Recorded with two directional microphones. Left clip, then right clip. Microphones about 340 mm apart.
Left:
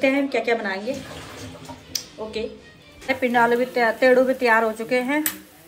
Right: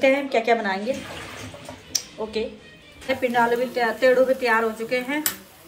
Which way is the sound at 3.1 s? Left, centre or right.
Centre.